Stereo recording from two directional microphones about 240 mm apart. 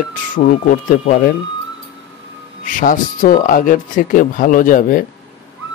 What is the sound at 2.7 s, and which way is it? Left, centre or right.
Speech, left.